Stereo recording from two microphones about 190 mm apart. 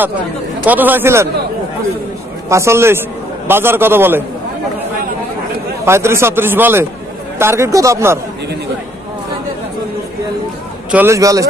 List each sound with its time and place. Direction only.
0.7 s a man's voice: 10° right (ahead or behind)
2.5 s a man's voice: 15° right (ahead or behind)
5.9 s a man's voice: 15° right (ahead or behind)
10.9 s a man's voice: 10° right (ahead or behind)